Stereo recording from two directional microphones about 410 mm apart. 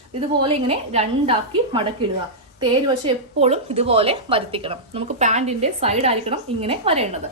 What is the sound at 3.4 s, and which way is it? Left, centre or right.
A woman's voice, centre.